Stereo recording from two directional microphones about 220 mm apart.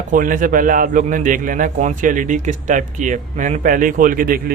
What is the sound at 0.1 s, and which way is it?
A man's voice, 40° right (ahead or behind).